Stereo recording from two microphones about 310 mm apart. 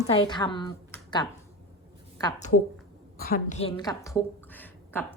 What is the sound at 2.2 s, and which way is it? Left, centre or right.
A woman's voice, left.